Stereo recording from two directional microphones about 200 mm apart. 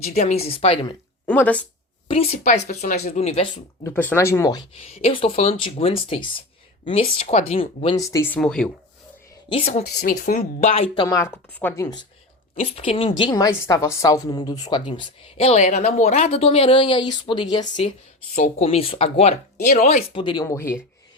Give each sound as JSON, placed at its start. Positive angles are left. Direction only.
{"t": 0.0, "sound": "speech", "side_deg": 35}
{"t": 1.3, "sound": "speech", "side_deg": 5}
{"t": 2.4, "sound": "speech", "side_deg": 40}
{"t": 3.8, "sound": "speech", "side_deg": 10}
{"t": 4.8, "sound": "a woman's voice", "side_deg": 30}
{"t": 10.0, "sound": "speech", "side_deg": 45}
{"t": 12.7, "sound": "a woman's voice", "side_deg": 30}